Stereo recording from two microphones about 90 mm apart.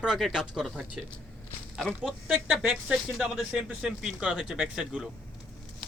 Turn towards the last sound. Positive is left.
turn(degrees=-10)  # may be behind; listen again after turning